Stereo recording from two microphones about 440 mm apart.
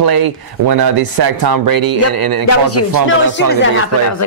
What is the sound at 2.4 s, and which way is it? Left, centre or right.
A woman's voice, left.